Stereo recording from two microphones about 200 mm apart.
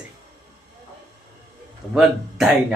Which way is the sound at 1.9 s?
5° right (ahead or behind).